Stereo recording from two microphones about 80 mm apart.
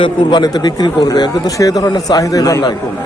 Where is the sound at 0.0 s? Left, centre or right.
Left.